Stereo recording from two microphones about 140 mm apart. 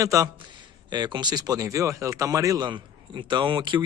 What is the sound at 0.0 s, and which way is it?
Speech, 25° right (ahead or behind).